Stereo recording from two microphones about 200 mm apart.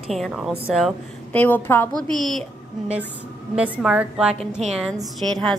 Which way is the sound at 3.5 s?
5° right (ahead or behind).